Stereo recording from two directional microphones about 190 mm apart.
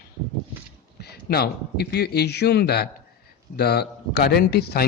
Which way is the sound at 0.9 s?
55° left (ahead or behind).